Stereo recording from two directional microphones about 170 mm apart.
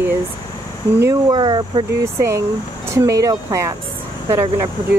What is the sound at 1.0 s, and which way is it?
Speech, 20° right (ahead or behind).